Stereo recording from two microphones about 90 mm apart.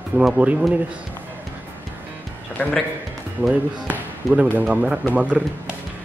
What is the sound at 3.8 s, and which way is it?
Speech, 15° right (ahead or behind).